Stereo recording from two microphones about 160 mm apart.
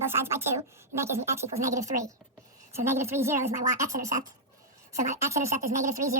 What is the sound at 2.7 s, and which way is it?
A woman's voice, 15° right (ahead or behind).